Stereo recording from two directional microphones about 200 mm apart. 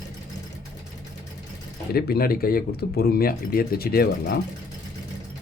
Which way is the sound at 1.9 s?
50° left (ahead or behind).